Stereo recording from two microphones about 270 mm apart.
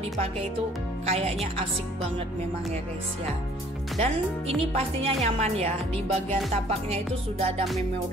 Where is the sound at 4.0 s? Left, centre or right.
Right.